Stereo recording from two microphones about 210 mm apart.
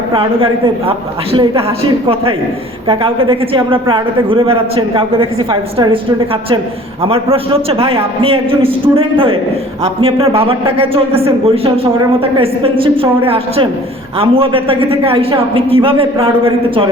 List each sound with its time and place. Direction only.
0.1 s a man's voice: 25° right (ahead or behind)
2.8 s a man's voice: 25° right (ahead or behind)
7.0 s a man's voice: 25° right (ahead or behind)